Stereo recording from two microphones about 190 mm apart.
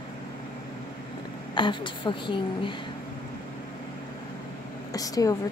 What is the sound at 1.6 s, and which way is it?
Speech, 25° left (ahead or behind).